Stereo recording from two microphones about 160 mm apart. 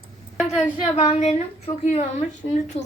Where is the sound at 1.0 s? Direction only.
45° left (ahead or behind).